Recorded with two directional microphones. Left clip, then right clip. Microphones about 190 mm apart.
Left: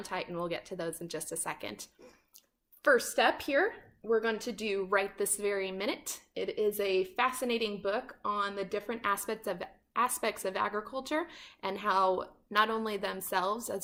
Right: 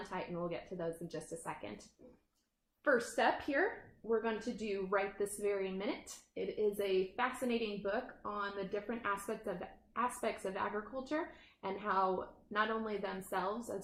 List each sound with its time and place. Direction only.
0.1 s a woman's voice: 30° left (ahead or behind)
2.8 s a woman's voice: 25° left (ahead or behind)